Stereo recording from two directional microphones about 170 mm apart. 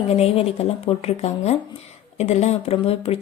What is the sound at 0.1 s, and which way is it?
Speech, 35° left (ahead or behind).